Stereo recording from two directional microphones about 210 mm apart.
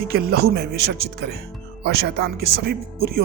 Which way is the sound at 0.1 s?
50° right (ahead or behind).